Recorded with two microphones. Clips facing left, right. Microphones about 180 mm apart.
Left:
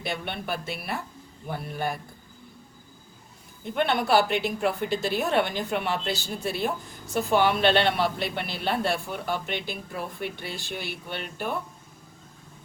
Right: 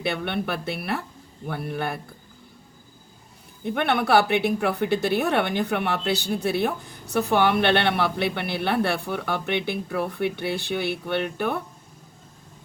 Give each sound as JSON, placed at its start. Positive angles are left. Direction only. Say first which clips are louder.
{"t": 0.0, "sound": "a woman's voice", "louder": "right 6 dB", "side_deg": -60}
{"t": 3.6, "sound": "a woman's voice", "louder": "right 2 dB", "side_deg": -60}